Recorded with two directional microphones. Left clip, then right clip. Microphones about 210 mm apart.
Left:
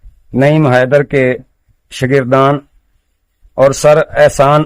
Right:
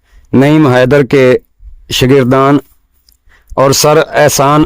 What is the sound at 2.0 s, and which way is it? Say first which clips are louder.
Speech: right 2 dB; 45° right (ahead or behind).